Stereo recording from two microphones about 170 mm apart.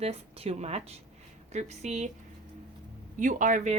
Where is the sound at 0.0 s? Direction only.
35° right (ahead or behind).